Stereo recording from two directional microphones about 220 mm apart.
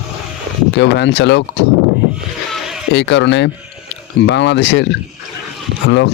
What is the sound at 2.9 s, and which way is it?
Speech, 50° left (ahead or behind).